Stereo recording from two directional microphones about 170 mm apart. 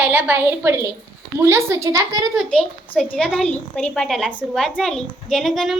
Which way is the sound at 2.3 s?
Centre (ahead or behind).